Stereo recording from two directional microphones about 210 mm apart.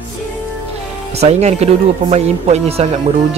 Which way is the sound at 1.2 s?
30° right (ahead or behind).